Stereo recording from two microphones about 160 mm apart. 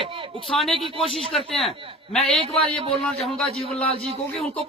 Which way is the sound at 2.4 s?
35° right (ahead or behind).